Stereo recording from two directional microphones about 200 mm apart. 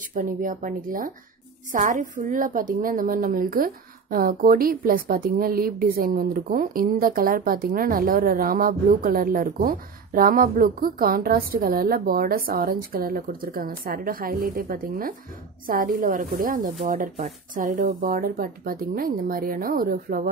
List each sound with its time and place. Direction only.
0.1 s a woman's voice: 40° right (ahead or behind)